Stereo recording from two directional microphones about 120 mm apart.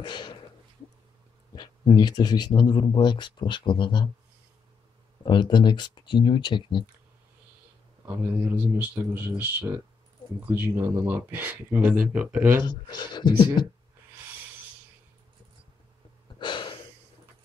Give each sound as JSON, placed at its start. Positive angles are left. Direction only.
{"t": 0.0, "sound": "speech", "side_deg": 40}
{"t": 1.5, "sound": "speech", "side_deg": 40}
{"t": 5.2, "sound": "speech", "side_deg": 40}
{"t": 8.0, "sound": "speech", "side_deg": -20}
{"t": 12.6, "sound": "speech", "side_deg": 35}
{"t": 16.3, "sound": "a sound", "side_deg": 40}